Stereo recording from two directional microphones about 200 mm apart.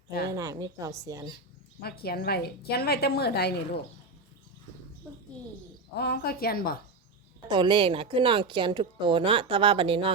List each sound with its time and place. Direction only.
0.3 s a woman's voice: 15° right (ahead or behind)
1.8 s a woman's voice: 50° left (ahead or behind)
5.9 s a woman's voice: 55° left (ahead or behind)
7.4 s a woman's voice: 25° right (ahead or behind)